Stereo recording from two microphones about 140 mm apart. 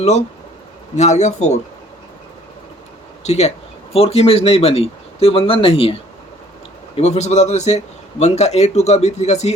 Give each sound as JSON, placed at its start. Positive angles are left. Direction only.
{"t": 0.9, "sound": "speech", "side_deg": 55}
{"t": 3.2, "sound": "speech", "side_deg": 50}